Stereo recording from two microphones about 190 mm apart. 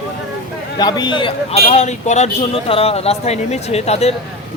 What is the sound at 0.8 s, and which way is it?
A man's voice, 20° left (ahead or behind).